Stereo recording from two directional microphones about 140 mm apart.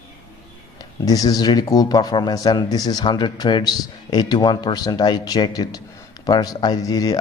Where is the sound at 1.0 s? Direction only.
25° left (ahead or behind).